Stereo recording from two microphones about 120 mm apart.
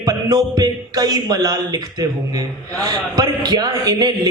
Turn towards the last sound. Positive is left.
turn(degrees=-30)  # may be behind; listen again after turning